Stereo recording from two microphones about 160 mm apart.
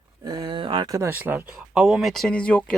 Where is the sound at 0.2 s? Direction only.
25° right (ahead or behind).